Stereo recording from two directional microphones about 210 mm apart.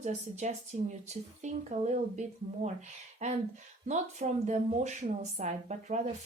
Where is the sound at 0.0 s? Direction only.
35° right (ahead or behind).